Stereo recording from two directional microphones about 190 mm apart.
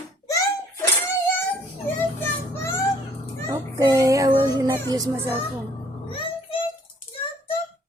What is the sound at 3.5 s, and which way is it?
Child singing, 15° right (ahead or behind).